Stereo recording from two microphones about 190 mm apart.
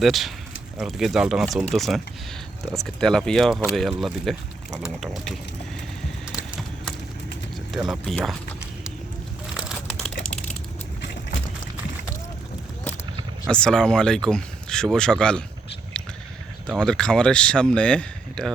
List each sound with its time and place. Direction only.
0.0 s speech: centre (ahead or behind)
7.7 s speech: centre (ahead or behind)
11.0 s a sound: 65° left (ahead or behind)
13.5 s speech: 5° left (ahead or behind)
16.6 s speech: 5° left (ahead or behind)